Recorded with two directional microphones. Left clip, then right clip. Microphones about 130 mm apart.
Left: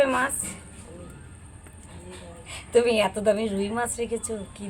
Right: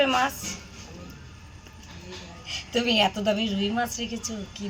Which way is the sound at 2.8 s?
25° left (ahead or behind).